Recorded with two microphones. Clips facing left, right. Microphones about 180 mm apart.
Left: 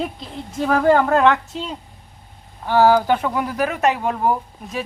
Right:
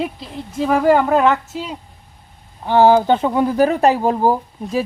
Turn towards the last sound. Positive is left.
turn(degrees=-30)  # may be behind; listen again after turning